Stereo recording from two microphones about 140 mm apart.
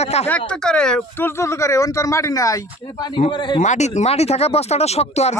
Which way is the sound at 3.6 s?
55° left (ahead or behind).